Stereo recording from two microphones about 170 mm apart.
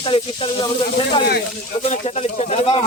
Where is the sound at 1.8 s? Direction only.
40° left (ahead or behind).